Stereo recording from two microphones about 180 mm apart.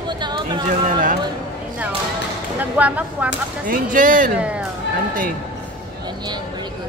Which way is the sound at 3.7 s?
50° right (ahead or behind).